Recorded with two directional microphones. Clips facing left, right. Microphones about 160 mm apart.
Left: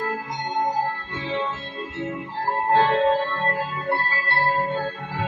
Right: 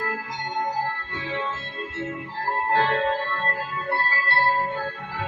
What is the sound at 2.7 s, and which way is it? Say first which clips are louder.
Music: left 5 dB; 20° left (ahead or behind).